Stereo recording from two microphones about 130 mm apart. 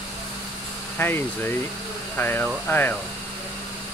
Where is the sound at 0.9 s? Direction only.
15° left (ahead or behind).